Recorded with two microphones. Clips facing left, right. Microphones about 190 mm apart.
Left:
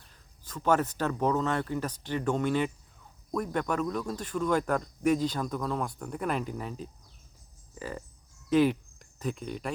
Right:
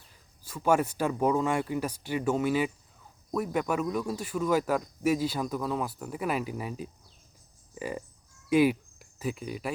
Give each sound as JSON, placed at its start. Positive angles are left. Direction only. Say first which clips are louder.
{"t": 0.1, "sound": "speech", "louder": "even", "side_deg": -10}